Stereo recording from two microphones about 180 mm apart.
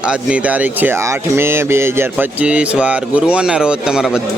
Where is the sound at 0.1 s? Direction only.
5° right (ahead or behind).